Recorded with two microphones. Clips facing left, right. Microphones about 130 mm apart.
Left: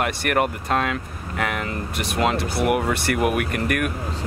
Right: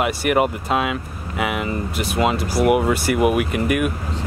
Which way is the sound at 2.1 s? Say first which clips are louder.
Right 2 dB; 5° right (ahead or behind).